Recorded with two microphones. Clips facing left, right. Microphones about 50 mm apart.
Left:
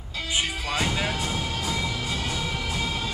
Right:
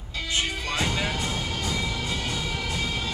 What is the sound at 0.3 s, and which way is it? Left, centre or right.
Music, centre.